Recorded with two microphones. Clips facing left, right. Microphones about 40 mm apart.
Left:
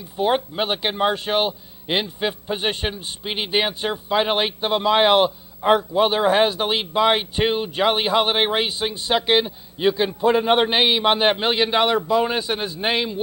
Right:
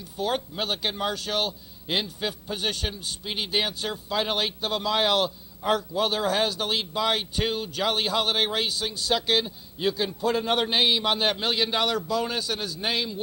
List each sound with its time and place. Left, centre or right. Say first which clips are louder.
0.2 s a man's voice: left 7 dB; left